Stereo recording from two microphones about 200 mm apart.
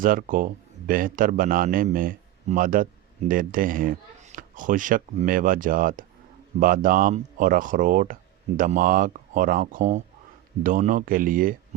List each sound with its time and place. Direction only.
0.0 s speech: 45° right (ahead or behind)